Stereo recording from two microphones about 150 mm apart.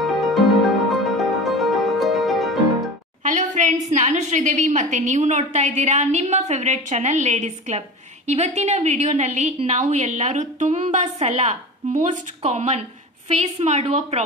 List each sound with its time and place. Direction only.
0.0 s music: centre (ahead or behind)
3.3 s a woman's voice: 55° right (ahead or behind)